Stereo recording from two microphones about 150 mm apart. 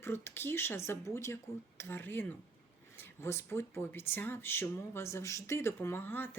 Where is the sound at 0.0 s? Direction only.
15° left (ahead or behind).